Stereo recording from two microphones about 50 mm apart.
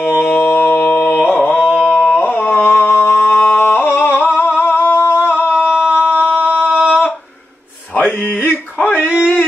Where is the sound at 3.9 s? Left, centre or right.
Left.